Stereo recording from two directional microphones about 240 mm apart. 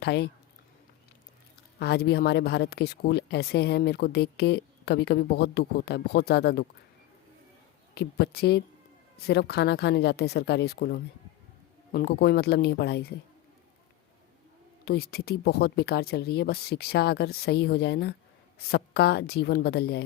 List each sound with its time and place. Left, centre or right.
0.0 s speech: left
1.8 s speech: left
7.9 s speech: left
14.8 s speech: left